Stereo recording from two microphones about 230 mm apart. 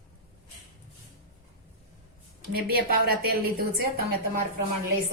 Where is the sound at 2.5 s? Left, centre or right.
Right.